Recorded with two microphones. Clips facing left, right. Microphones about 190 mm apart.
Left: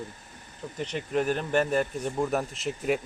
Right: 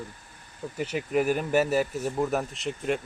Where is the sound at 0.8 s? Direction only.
5° right (ahead or behind).